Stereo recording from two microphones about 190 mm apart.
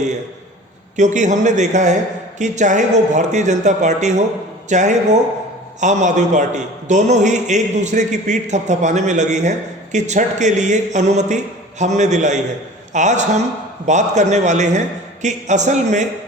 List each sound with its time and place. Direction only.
0.9 s a man's voice: 40° right (ahead or behind)